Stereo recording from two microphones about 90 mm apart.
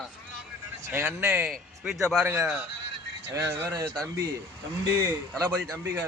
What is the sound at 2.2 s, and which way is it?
Speech, 20° right (ahead or behind).